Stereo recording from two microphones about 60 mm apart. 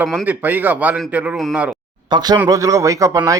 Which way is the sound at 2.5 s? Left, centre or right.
Right.